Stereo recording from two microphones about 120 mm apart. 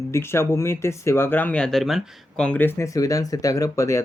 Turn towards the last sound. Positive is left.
turn(degrees=25)  # may be behind; listen again after turning